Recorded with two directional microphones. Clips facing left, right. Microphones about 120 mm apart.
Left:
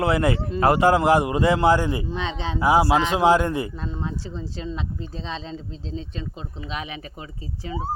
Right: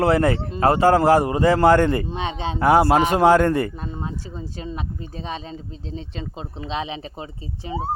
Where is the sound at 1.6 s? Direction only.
60° right (ahead or behind).